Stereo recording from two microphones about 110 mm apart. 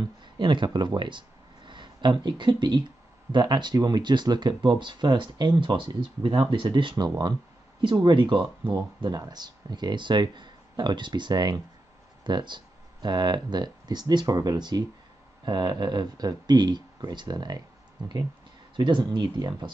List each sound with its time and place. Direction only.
0.2 s speech: 45° right (ahead or behind)